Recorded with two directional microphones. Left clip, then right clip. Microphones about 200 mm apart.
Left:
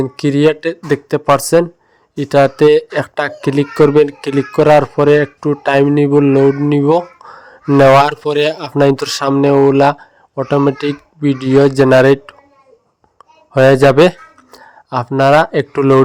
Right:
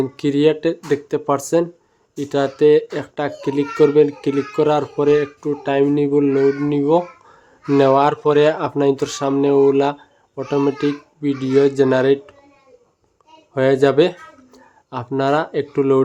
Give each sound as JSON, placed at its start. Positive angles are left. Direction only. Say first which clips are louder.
{"t": 0.0, "sound": "speech", "louder": "left 4 dB", "side_deg": 35}
{"t": 13.5, "sound": "speech", "louder": "left 7 dB", "side_deg": 40}